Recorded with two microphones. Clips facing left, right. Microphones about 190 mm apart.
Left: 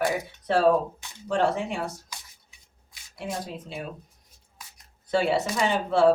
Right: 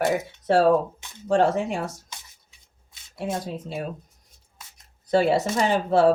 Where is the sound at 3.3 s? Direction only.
45° right (ahead or behind).